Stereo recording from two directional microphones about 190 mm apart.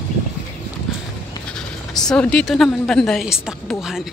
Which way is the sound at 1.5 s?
5° left (ahead or behind).